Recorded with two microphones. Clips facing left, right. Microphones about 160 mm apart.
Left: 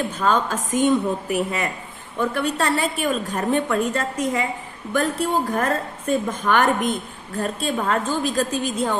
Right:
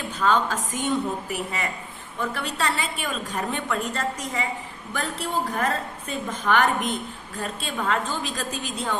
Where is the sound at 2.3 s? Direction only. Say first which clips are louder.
Left 5 dB; 45° left (ahead or behind).